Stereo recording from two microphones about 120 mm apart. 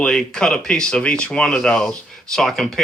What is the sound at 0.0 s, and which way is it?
Speech, 5° left (ahead or behind).